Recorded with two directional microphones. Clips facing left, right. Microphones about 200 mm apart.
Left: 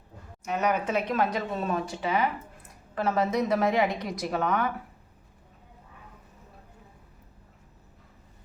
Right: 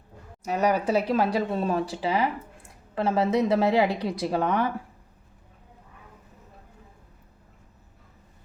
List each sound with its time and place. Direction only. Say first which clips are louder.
0.4 s speech: right 3 dB; 35° right (ahead or behind)